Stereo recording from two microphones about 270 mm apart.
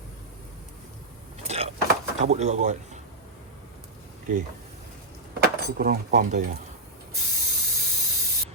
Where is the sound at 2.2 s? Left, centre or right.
Right.